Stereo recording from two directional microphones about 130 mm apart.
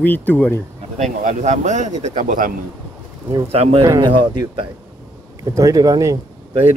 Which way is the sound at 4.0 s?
40° right (ahead or behind).